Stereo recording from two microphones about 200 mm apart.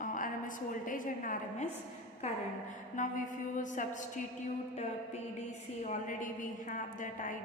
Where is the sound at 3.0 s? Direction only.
40° left (ahead or behind).